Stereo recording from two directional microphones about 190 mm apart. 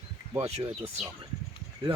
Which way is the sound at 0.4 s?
35° right (ahead or behind).